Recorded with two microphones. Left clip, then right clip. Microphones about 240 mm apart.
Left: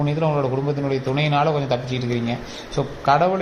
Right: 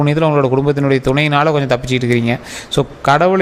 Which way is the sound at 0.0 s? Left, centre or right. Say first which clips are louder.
Right 8 dB; right.